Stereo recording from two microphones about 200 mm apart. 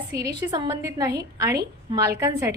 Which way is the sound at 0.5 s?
15° right (ahead or behind).